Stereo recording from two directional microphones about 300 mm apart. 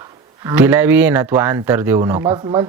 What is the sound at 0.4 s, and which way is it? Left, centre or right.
Speech, centre.